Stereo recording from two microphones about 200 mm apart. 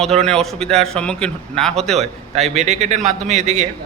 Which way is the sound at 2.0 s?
35° right (ahead or behind).